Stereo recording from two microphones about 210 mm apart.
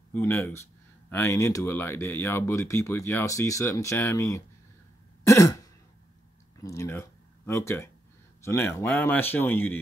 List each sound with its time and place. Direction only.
0.1 s speech: 10° left (ahead or behind)
5.2 s throat clearing: 15° left (ahead or behind)
6.6 s a sound: 15° left (ahead or behind)
8.5 s speech: 10° left (ahead or behind)